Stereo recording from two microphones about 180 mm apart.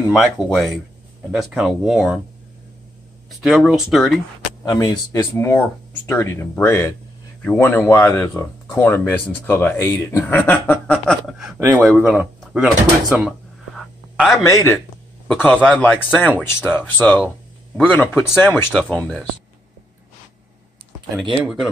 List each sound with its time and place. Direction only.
0.0 s speech: centre (ahead or behind)
3.3 s speech: centre (ahead or behind)
4.6 s speech: 20° left (ahead or behind); by 12.7 s centre (ahead or behind)
14.1 s a man's voice: centre (ahead or behind)
14.4 s speech: 15° left (ahead or behind)
21.2 s speech: centre (ahead or behind)